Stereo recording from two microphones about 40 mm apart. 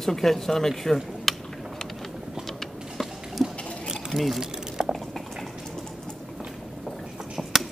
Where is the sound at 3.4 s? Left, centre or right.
Centre.